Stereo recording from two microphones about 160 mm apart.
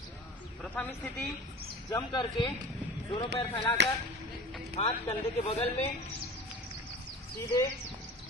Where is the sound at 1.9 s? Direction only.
25° left (ahead or behind).